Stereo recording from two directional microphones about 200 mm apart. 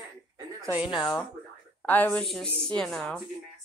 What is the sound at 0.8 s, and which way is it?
Speech, 25° left (ahead or behind).